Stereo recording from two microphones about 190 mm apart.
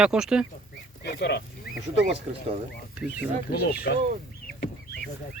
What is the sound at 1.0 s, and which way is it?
Speech, 60° left (ahead or behind).